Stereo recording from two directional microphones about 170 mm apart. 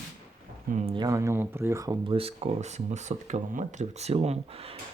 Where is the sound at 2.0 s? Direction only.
35° right (ahead or behind).